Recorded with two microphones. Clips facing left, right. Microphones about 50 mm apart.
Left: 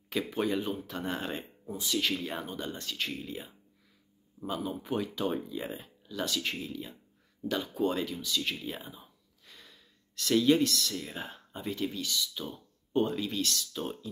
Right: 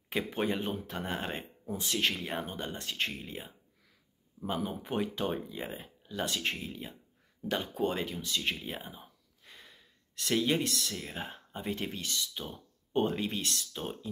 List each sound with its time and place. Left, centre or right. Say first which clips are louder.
0.1 s speech: left 1 dB; right
1.7 s speech: even; right
11.7 s speech: left 3 dB; right